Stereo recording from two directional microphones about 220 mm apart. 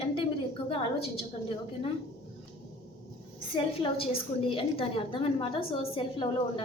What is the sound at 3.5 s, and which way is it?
A woman's voice, 25° left (ahead or behind).